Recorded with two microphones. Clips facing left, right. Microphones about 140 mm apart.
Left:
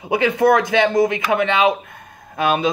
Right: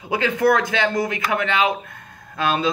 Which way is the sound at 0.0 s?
20° left (ahead or behind).